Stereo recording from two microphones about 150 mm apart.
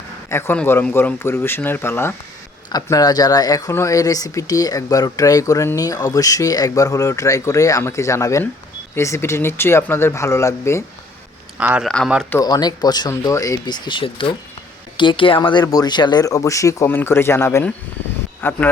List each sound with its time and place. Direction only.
0.3 s speech: 15° left (ahead or behind)
2.6 s speech: 25° left (ahead or behind)
11.5 s speech: 5° right (ahead or behind)
11.9 s speech: 5° left (ahead or behind)
12.4 s speech: 25° left (ahead or behind)